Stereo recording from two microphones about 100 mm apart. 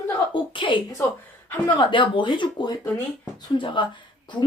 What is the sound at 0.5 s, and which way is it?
A woman's voice, 55° left (ahead or behind).